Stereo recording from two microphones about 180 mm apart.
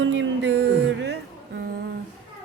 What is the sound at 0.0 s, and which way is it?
Music, 90° right.